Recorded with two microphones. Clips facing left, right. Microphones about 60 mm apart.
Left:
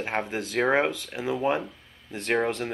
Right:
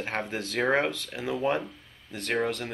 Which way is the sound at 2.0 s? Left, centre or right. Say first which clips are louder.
Left 3 dB; left.